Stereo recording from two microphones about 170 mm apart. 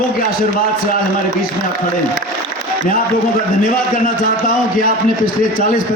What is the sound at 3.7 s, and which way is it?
A man's voice, 55° left (ahead or behind).